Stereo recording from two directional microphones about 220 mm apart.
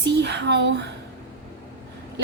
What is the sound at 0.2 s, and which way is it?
Speech, 50° right (ahead or behind).